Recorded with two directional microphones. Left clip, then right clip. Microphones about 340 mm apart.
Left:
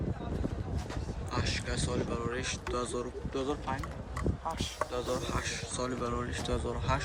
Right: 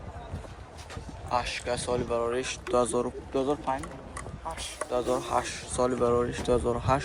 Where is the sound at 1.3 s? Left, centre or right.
Centre.